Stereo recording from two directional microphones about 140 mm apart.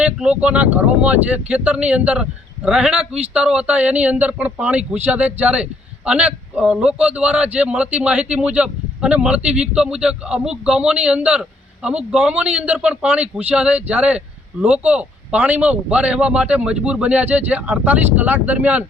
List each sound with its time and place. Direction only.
0.0 s a man's voice: 10° right (ahead or behind)